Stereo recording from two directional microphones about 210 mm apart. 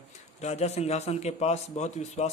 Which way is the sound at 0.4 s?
30° left (ahead or behind).